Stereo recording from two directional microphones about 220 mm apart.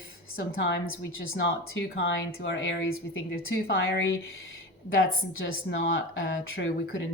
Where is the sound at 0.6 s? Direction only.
55° left (ahead or behind).